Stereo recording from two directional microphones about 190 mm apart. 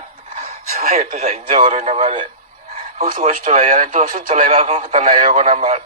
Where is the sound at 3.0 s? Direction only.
45° right (ahead or behind).